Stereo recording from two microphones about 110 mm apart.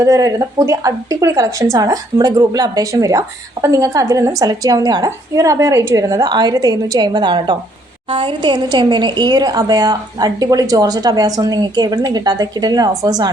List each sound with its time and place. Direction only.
0.0 s a woman's voice: 30° right (ahead or behind)